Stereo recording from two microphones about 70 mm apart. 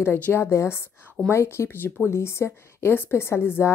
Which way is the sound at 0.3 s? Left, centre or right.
Left.